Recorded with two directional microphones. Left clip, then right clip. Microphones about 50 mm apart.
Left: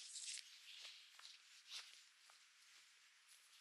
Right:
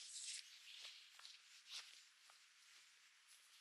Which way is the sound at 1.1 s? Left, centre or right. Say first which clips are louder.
Even; left.